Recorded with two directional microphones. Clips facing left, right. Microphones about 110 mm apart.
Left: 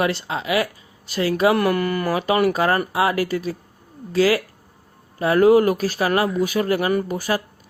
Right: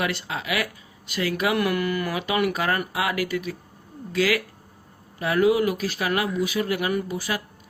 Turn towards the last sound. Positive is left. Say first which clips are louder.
# left 5 dB
turn(degrees=45)  # may be behind; listen again after turning